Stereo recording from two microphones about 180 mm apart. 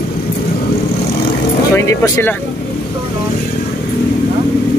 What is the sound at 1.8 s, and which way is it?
Speech, 15° left (ahead or behind).